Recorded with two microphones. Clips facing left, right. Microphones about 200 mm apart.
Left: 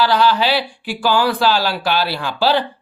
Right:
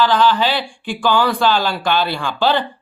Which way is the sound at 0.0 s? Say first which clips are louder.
Even; 10° left (ahead or behind).